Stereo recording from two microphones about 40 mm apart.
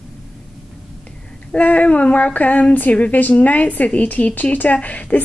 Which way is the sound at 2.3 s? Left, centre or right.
Left.